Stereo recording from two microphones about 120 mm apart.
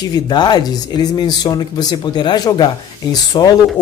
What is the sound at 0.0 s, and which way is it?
Speech, 35° left (ahead or behind).